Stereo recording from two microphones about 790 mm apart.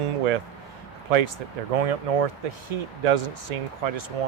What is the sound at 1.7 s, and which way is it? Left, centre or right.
Speech, right.